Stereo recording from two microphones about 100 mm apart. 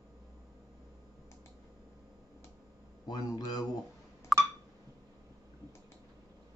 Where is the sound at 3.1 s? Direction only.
40° left (ahead or behind).